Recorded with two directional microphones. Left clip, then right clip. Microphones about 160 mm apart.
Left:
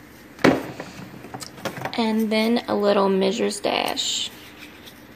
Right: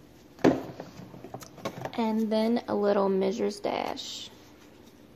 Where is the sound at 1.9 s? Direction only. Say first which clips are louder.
Left 5 dB; 10° right (ahead or behind).